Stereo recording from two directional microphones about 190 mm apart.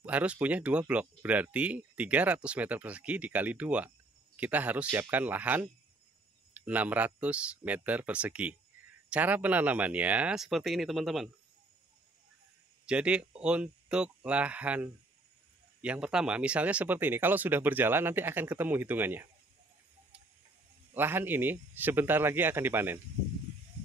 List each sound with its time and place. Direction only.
0.0 s speech: 5° right (ahead or behind)
12.8 s speech: 5° right (ahead or behind)
20.9 s speech: 10° right (ahead or behind)